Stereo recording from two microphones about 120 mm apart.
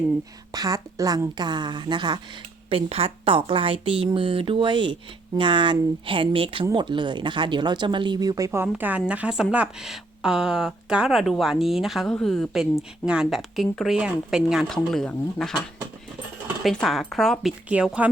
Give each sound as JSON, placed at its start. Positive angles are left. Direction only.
{"t": 0.5, "sound": "speech", "side_deg": -30}
{"t": 2.6, "sound": "speech", "side_deg": -55}
{"t": 8.6, "sound": "a woman's voice", "side_deg": -15}
{"t": 16.6, "sound": "a woman's voice", "side_deg": 0}
{"t": 17.7, "sound": "speech", "side_deg": -10}